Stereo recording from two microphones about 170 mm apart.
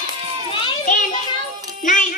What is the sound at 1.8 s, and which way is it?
Music, 50° left (ahead or behind).